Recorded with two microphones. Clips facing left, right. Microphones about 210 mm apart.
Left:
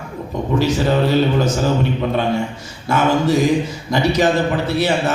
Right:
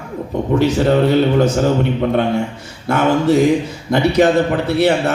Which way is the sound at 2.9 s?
60° right (ahead or behind).